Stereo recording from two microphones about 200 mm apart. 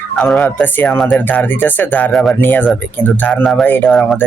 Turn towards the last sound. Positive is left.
turn(degrees=0)  # may be behind; listen again after turning